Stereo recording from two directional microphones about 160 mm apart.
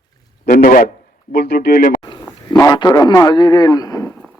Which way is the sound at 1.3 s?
85° left.